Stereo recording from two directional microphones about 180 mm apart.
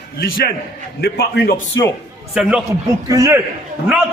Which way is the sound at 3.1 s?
15° right (ahead or behind).